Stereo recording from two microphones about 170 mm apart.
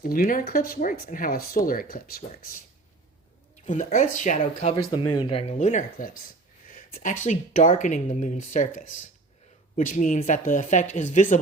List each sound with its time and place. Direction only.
0.0 s speech: 55° left (ahead or behind)
3.7 s speech: 45° left (ahead or behind)
4.9 s speech: 30° left (ahead or behind); by 11.3 s 50° left (ahead or behind)